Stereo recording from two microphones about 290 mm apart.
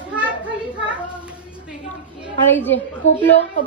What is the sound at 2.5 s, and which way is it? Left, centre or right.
Speech, centre.